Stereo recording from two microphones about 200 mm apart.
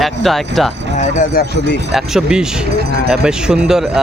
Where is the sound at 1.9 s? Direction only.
Centre (ahead or behind).